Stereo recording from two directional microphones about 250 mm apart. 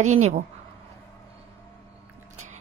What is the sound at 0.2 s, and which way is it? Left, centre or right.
Speech, right.